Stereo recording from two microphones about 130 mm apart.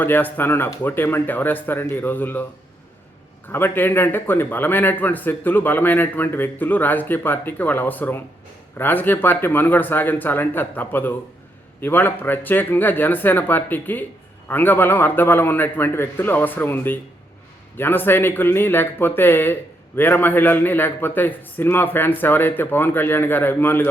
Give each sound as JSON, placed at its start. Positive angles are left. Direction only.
{"t": 0.0, "sound": "a man's voice", "side_deg": 15}
{"t": 3.5, "sound": "a man's voice", "side_deg": 15}